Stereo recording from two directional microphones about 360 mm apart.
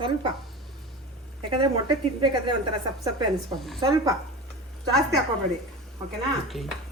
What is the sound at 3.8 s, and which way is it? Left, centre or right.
Speech, centre.